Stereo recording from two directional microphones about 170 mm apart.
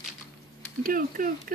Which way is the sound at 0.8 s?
55° right (ahead or behind).